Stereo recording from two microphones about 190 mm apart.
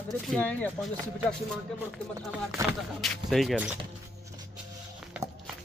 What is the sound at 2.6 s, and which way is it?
Speech, 15° right (ahead or behind).